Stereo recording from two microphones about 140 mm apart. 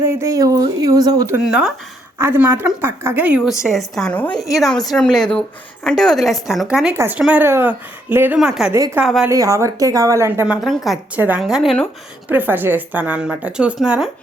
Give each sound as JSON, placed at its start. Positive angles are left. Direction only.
{"t": 0.0, "sound": "speech", "side_deg": -20}
{"t": 1.5, "sound": "a woman's voice", "side_deg": -5}
{"t": 2.1, "sound": "a woman's voice", "side_deg": -15}
{"t": 6.9, "sound": "a woman's voice", "side_deg": -20}
{"t": 9.3, "sound": "speech", "side_deg": -25}
{"t": 10.4, "sound": "a woman's voice", "side_deg": -5}
{"t": 12.3, "sound": "a woman's voice", "side_deg": -15}